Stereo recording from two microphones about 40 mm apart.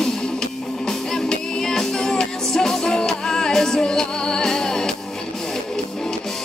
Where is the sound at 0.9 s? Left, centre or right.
Centre.